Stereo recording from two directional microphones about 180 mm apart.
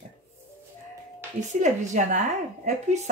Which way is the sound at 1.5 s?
40° right (ahead or behind).